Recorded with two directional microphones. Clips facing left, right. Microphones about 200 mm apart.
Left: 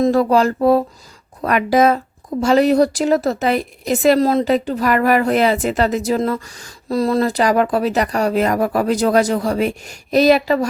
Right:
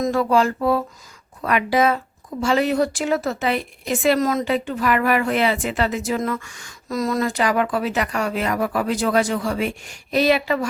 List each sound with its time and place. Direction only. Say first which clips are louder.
0.0 s a woman's voice: left 5 dB; 35° left (ahead or behind)